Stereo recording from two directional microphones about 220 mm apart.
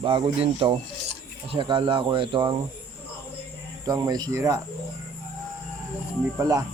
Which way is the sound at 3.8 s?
15° right (ahead or behind).